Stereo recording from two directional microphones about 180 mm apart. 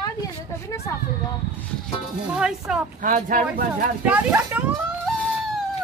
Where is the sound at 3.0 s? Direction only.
50° right (ahead or behind).